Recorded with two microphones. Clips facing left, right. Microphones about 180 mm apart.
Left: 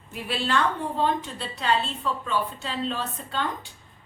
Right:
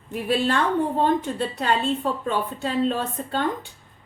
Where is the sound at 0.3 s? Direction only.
50° right (ahead or behind).